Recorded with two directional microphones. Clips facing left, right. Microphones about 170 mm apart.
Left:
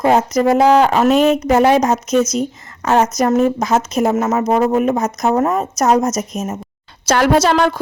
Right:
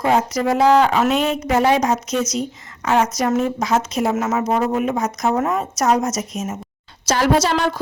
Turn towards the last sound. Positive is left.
turn(degrees=55)  # may be behind; listen again after turning